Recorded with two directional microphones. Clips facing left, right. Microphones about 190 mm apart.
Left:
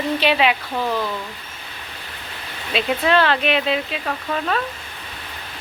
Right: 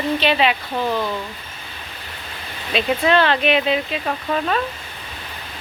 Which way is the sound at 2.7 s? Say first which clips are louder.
Right 1 dB; centre (ahead or behind).